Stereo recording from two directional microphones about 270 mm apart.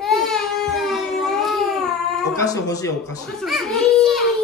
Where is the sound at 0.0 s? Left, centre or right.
Centre.